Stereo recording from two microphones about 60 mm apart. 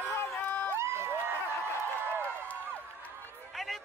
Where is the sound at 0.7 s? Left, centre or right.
Right.